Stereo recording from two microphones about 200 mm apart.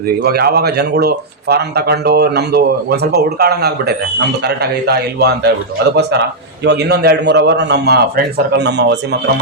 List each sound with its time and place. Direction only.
0.2 s a man's voice: 50° right (ahead or behind)